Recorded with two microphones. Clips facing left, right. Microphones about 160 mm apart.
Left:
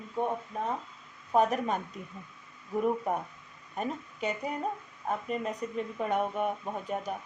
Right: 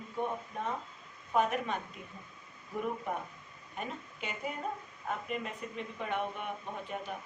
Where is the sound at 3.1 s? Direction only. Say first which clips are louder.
Left 5 dB; 45° left (ahead or behind).